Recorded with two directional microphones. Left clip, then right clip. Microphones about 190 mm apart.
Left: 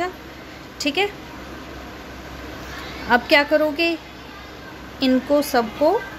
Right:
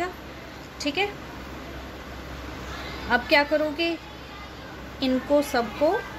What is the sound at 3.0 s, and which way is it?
Speech, 25° left (ahead or behind).